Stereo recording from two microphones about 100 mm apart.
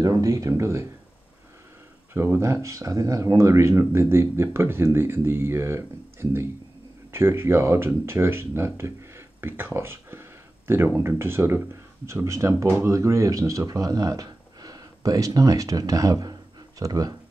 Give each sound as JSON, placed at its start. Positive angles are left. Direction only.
{"t": 0.0, "sound": "speech", "side_deg": -35}
{"t": 2.1, "sound": "speech", "side_deg": -25}